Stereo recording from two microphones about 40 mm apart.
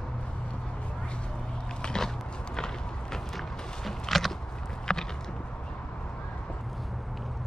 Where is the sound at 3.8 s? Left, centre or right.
Centre.